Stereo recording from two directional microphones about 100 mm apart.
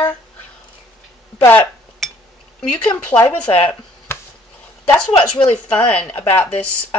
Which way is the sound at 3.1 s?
20° left (ahead or behind).